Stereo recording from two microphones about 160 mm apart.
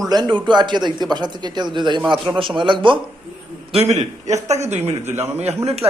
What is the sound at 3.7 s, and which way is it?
A man's voice, 45° right (ahead or behind).